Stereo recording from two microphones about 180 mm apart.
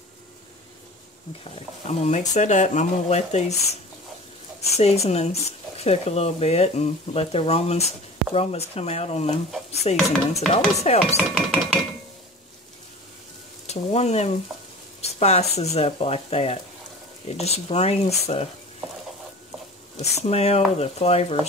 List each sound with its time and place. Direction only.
1.5 s speech: 40° left (ahead or behind)
4.7 s speech: 35° left (ahead or behind)
9.9 s a sound: centre (ahead or behind)
10.5 s speech: 35° left (ahead or behind)
11.3 s a sound: 5° left (ahead or behind)
13.7 s speech: 35° left (ahead or behind)
20.0 s speech: 35° left (ahead or behind)